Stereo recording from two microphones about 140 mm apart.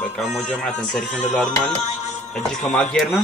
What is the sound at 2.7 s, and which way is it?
Speech, centre (ahead or behind).